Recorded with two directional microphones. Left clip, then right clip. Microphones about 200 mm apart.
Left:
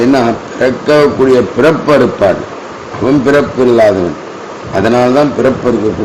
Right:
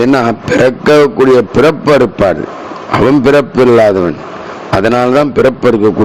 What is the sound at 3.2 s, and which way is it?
Speech, 45° right (ahead or behind).